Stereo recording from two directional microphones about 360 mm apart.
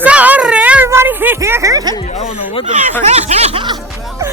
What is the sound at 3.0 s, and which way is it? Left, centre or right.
Speech, centre.